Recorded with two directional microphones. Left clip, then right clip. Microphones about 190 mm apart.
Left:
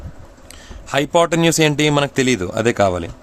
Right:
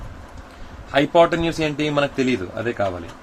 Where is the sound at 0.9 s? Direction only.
60° left (ahead or behind).